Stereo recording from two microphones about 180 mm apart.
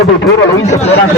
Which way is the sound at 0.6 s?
40° left (ahead or behind).